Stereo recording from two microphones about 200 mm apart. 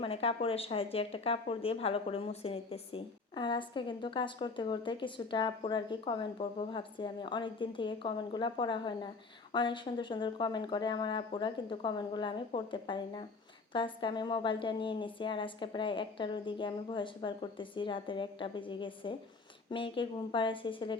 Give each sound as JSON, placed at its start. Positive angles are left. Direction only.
{"t": 0.0, "sound": "speech", "side_deg": 30}